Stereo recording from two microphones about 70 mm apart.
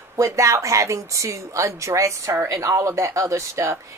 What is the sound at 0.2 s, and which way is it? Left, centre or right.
Speech, right.